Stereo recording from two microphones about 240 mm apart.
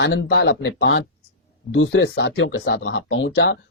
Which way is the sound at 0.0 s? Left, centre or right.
Left.